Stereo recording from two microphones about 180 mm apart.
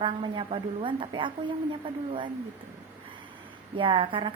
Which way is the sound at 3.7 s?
30° right (ahead or behind).